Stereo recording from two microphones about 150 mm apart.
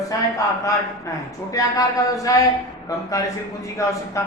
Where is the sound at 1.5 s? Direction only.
25° left (ahead or behind).